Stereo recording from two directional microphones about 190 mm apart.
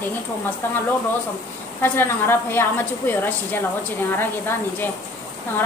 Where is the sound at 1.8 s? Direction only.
10° left (ahead or behind).